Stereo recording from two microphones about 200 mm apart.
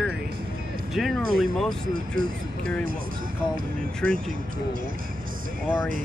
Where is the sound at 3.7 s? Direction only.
45° right (ahead or behind).